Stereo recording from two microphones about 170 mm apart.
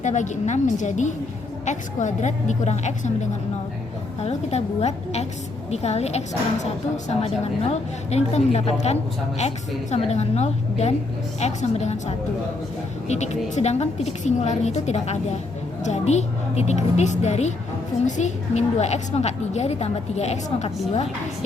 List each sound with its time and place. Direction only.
0.0 s a woman's voice: 45° left (ahead or behind)